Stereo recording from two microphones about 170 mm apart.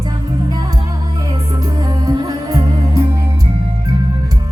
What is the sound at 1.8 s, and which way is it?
Music, 20° right (ahead or behind).